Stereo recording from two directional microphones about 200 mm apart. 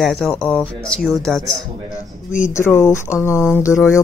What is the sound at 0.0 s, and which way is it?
Speech, centre (ahead or behind).